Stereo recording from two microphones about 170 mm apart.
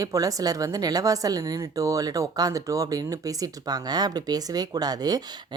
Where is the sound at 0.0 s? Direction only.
20° right (ahead or behind).